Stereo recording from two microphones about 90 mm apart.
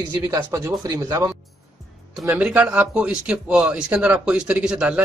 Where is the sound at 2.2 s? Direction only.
15° right (ahead or behind).